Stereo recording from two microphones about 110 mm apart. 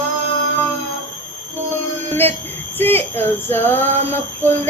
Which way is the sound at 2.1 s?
20° left (ahead or behind).